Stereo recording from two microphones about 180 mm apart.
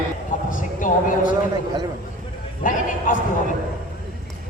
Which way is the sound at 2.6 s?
50° left (ahead or behind).